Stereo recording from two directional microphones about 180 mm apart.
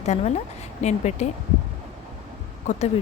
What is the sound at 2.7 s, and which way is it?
Speech, 40° left (ahead or behind).